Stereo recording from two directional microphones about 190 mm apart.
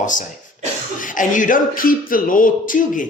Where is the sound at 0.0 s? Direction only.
45° left (ahead or behind).